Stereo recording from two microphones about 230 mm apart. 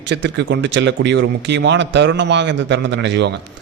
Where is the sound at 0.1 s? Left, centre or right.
Right.